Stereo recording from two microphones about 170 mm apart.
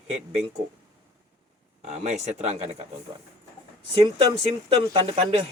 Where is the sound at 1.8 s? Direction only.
40° right (ahead or behind).